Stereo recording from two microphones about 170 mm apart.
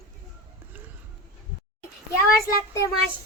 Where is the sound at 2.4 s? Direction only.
20° left (ahead or behind).